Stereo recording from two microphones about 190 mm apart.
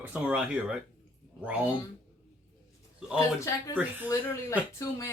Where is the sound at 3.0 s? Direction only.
5° right (ahead or behind).